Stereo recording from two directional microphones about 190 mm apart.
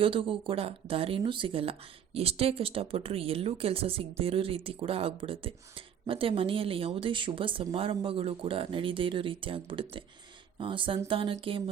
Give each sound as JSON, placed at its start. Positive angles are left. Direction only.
{"t": 0.0, "sound": "speech", "side_deg": -30}